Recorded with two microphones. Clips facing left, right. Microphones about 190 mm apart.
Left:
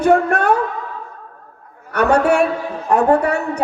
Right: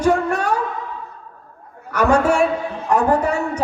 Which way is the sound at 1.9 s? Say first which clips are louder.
Left 2 dB; 65° left (ahead or behind).